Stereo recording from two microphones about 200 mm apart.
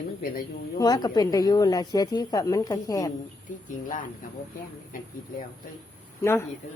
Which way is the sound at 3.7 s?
40° left (ahead or behind).